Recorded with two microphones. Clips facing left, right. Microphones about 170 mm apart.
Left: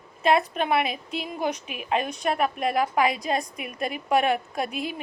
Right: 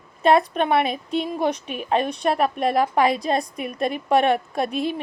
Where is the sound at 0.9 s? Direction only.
5° left (ahead or behind).